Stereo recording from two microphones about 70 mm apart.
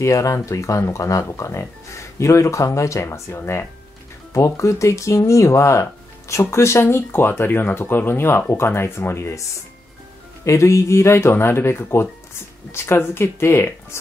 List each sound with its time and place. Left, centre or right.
0.0 s speech: left